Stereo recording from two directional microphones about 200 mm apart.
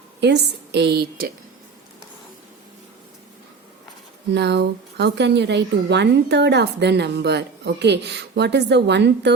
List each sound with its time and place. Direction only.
0.2 s a woman's voice: 55° right (ahead or behind)
4.4 s a woman's voice: 60° right (ahead or behind)